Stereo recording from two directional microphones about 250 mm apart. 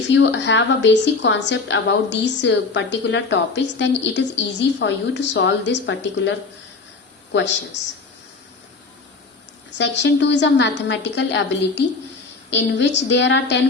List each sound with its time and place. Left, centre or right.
0.1 s a woman's voice: left
7.3 s a woman's voice: left
9.7 s a woman's voice: left